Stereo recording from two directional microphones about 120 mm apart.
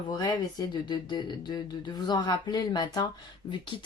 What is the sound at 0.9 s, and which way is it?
Speech, 40° left (ahead or behind).